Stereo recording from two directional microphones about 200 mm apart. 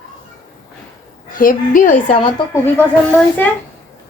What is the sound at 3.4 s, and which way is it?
Speech, 10° left (ahead or behind).